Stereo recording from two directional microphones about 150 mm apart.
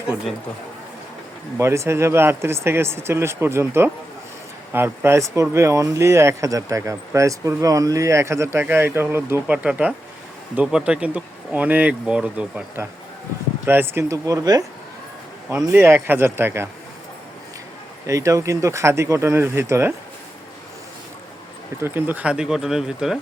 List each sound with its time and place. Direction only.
1.5 s speech: 20° right (ahead or behind)
18.0 s speech: 20° right (ahead or behind)
21.8 s speech: 15° right (ahead or behind)